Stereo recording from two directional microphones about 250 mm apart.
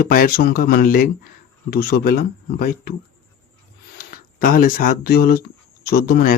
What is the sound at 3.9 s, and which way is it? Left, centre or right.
Speech, left.